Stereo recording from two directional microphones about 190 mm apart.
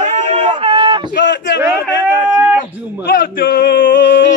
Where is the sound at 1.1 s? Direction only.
65° left (ahead or behind).